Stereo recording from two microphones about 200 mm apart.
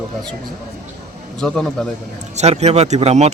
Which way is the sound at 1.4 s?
5° left (ahead or behind).